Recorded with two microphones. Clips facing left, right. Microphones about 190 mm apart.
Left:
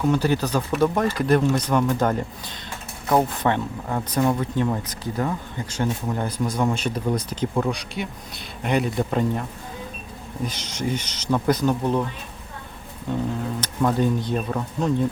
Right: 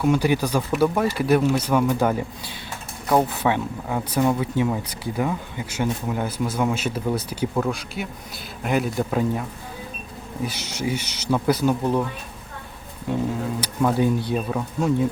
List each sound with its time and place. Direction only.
0.0 s a man's voice: 10° right (ahead or behind)
13.6 s speech: 10° right (ahead or behind)